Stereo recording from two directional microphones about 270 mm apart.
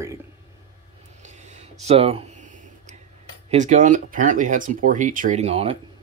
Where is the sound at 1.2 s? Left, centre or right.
Right.